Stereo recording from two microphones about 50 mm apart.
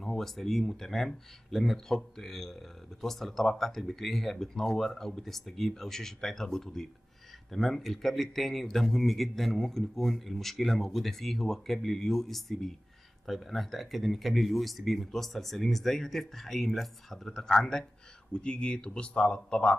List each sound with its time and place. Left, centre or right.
0.0 s speech: centre